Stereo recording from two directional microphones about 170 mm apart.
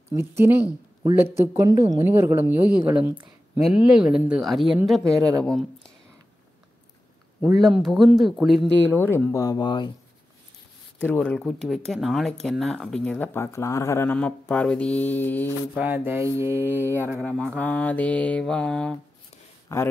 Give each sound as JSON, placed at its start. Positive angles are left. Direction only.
{"t": 0.1, "sound": "speech", "side_deg": -15}
{"t": 5.0, "sound": "speech", "side_deg": -20}
{"t": 5.4, "sound": "speech", "side_deg": 0}
{"t": 7.5, "sound": "speech", "side_deg": 0}
{"t": 8.9, "sound": "speech", "side_deg": 10}
{"t": 11.0, "sound": "speech", "side_deg": 10}
{"t": 15.7, "sound": "speech", "side_deg": -10}
{"t": 17.1, "sound": "speech", "side_deg": 5}
{"t": 19.7, "sound": "speech", "side_deg": 20}